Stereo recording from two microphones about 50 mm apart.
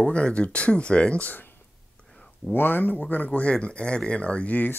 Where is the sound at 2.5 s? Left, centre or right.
Left.